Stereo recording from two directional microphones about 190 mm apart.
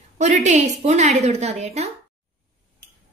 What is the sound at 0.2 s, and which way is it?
A woman's voice, 40° right (ahead or behind).